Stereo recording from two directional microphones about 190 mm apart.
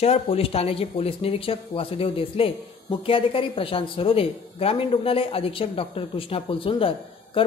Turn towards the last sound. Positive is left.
turn(degrees=30)  # may be behind; listen again after turning